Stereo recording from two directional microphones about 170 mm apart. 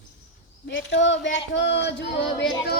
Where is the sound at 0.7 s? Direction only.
90° left.